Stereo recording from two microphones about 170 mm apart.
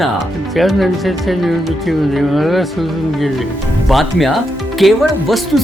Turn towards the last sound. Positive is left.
turn(degrees=0)  # may be behind; listen again after turning